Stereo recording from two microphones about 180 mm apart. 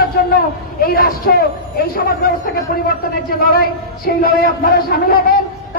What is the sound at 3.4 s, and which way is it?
A man's voice, 55° left (ahead or behind).